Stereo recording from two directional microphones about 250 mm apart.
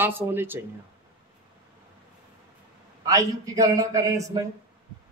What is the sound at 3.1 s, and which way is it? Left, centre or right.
Speech, centre.